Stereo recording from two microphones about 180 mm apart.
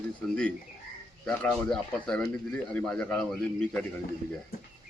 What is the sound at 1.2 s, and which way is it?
A man's voice, 5° left (ahead or behind).